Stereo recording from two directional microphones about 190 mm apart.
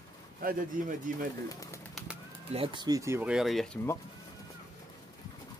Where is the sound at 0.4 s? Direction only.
50° right (ahead or behind).